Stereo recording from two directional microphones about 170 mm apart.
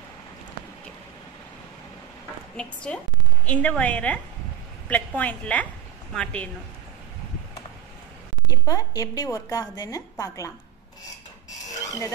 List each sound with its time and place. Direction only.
2.5 s a woman's voice: 5° left (ahead or behind)
8.5 s a woman's voice: 20° left (ahead or behind)